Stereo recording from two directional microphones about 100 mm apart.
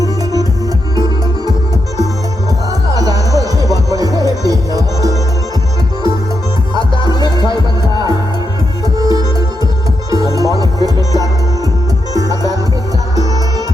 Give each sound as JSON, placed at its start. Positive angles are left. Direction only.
{"t": 0.9, "sound": "music", "side_deg": -40}
{"t": 2.9, "sound": "music", "side_deg": -40}
{"t": 6.7, "sound": "music", "side_deg": 50}
{"t": 9.0, "sound": "music", "side_deg": -40}